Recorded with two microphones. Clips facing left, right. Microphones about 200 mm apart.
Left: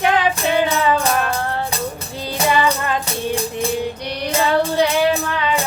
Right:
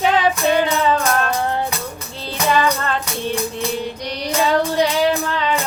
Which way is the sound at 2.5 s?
10° left (ahead or behind).